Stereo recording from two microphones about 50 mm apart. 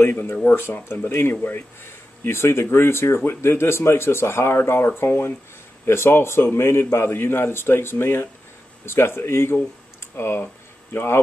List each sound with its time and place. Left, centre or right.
0.0 s a man's voice: left